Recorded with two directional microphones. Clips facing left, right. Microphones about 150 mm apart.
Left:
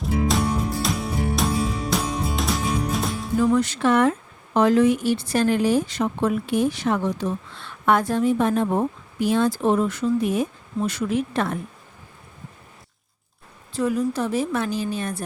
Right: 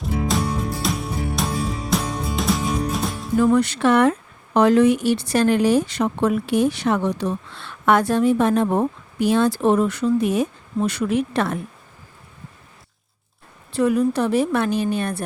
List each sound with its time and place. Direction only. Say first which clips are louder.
0.0 s music: left 1 dB; centre (ahead or behind)
3.4 s speech: right 3 dB; 65° right (ahead or behind)
13.7 s a woman's voice: right 4 dB; 65° right (ahead or behind)